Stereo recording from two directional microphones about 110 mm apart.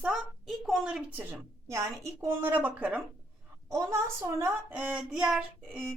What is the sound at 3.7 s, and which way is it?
Speech, 25° right (ahead or behind).